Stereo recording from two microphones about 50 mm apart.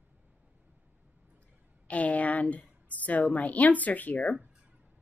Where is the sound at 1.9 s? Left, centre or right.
Left.